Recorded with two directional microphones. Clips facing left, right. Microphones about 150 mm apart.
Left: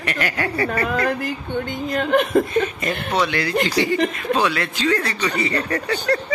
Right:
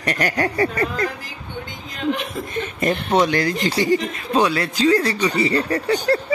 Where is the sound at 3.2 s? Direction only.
45° right (ahead or behind).